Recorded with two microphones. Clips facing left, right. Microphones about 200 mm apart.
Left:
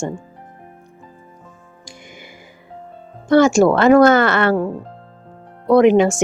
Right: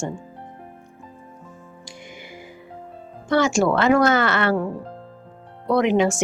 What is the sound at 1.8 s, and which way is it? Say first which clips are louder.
Music: left 1 dB; 45° left (ahead or behind).